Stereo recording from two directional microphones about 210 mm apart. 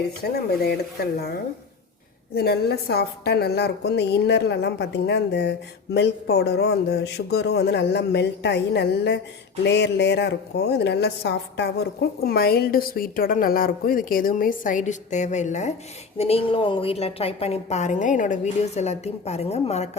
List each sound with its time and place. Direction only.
0.2 s a woman's voice: 50° left (ahead or behind)
2.3 s a woman's voice: 50° left (ahead or behind); by 20.0 s 30° left (ahead or behind)